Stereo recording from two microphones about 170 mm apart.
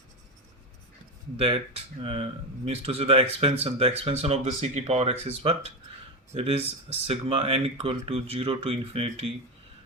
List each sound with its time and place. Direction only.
1.4 s speech: 35° right (ahead or behind)